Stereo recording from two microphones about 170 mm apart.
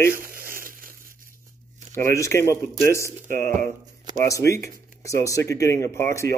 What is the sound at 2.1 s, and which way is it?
Speech, 15° left (ahead or behind).